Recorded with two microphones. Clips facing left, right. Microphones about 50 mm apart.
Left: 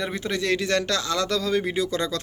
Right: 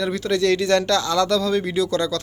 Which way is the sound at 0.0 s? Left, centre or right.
Centre.